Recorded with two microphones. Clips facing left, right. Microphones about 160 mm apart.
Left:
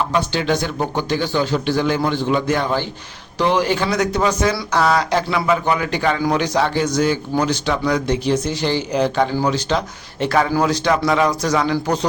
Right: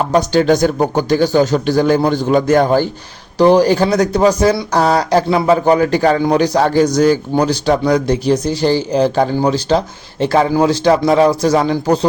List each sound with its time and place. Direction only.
0.1 s a man's voice: 40° right (ahead or behind)